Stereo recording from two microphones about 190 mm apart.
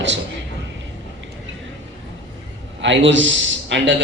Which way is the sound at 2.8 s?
75° right (ahead or behind).